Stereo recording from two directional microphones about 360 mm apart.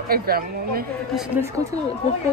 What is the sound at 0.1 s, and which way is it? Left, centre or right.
Speech, right.